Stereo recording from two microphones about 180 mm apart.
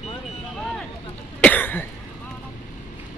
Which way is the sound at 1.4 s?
10° left (ahead or behind).